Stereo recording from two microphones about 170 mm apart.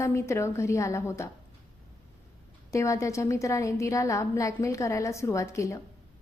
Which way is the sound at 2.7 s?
20° left (ahead or behind).